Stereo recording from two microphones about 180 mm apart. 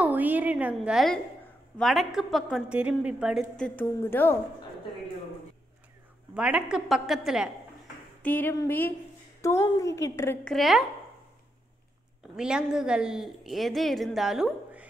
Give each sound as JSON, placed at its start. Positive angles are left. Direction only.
{"t": 0.0, "sound": "a woman's voice", "side_deg": -10}
{"t": 6.3, "sound": "a woman's voice", "side_deg": -5}
{"t": 8.2, "sound": "a woman's voice", "side_deg": 10}
{"t": 10.5, "sound": "a woman's voice", "side_deg": 0}
{"t": 12.4, "sound": "a woman's voice", "side_deg": -5}